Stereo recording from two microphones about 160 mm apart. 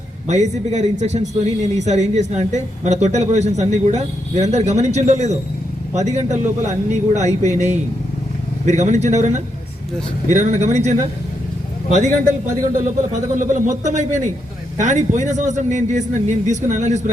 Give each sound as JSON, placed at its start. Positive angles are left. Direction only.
{"t": 0.3, "sound": "a man's voice", "side_deg": -45}